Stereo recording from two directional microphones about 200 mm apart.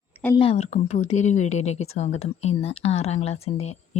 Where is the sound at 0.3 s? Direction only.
30° left (ahead or behind).